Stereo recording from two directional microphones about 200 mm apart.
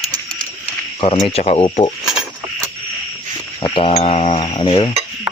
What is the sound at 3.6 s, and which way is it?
Speech, 25° left (ahead or behind).